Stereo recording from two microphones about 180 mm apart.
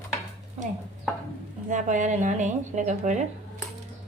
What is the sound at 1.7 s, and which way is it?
A woman's voice, 45° right (ahead or behind).